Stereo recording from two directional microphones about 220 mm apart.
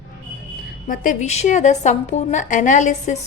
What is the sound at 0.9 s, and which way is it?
A woman's voice, 35° left (ahead or behind).